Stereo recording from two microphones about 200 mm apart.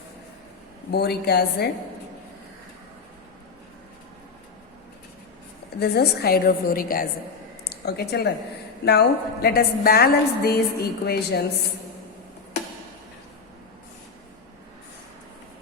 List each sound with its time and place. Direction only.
0.9 s a woman's voice: 55° left (ahead or behind)
5.8 s a woman's voice: 55° left (ahead or behind)
7.6 s a sound: 50° left (ahead or behind)
8.8 s a woman's voice: 55° left (ahead or behind)